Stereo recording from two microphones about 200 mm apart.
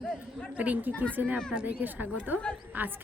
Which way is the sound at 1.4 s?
5° left (ahead or behind).